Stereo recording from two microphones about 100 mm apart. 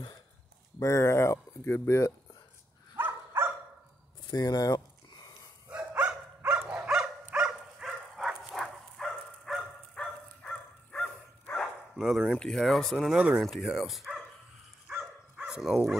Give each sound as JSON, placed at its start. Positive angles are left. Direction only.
{"t": 0.7, "sound": "speech", "side_deg": 30}
{"t": 3.0, "sound": "dog", "side_deg": -20}
{"t": 4.3, "sound": "a sound", "side_deg": 40}
{"t": 5.7, "sound": "dog", "side_deg": -10}
{"t": 11.9, "sound": "speech", "side_deg": 0}
{"t": 15.3, "sound": "speech", "side_deg": -10}